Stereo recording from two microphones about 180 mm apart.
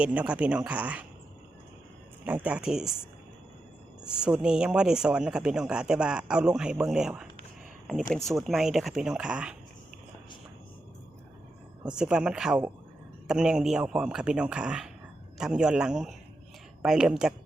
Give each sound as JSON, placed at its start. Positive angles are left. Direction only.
{"t": 0.0, "sound": "speech", "side_deg": -5}
{"t": 2.2, "sound": "speech", "side_deg": -10}
{"t": 4.0, "sound": "speech", "side_deg": -5}
{"t": 11.9, "sound": "speech", "side_deg": -5}